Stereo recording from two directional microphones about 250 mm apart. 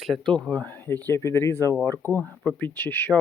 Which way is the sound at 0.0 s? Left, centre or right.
Centre.